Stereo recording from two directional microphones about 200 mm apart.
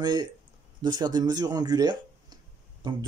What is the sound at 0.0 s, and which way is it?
Speech, 20° right (ahead or behind).